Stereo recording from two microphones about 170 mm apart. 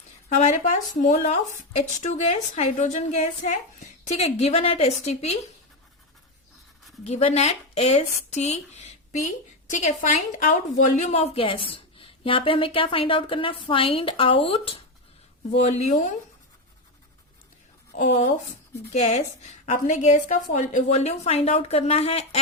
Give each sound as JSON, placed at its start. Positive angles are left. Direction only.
{"t": 0.3, "sound": "a woman's voice", "side_deg": 45}
{"t": 7.0, "sound": "a woman's voice", "side_deg": 35}
{"t": 17.9, "sound": "a woman's voice", "side_deg": 45}